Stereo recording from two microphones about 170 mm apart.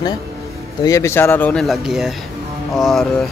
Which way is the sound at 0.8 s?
15° left (ahead or behind).